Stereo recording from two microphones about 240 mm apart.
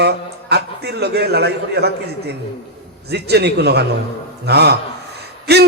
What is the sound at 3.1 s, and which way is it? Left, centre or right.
Speech, right.